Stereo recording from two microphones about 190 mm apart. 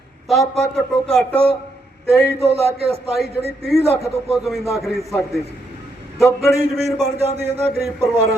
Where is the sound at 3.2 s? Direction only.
60° left (ahead or behind).